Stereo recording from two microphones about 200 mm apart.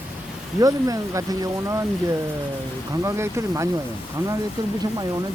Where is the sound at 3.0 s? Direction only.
15° right (ahead or behind).